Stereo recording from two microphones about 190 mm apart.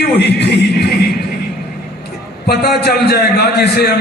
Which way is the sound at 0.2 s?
60° left (ahead or behind).